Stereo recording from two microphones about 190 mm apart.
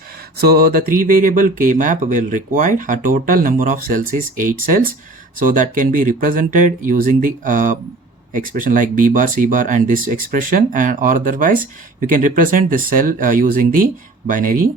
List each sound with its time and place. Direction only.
0.3 s speech: 50° right (ahead or behind)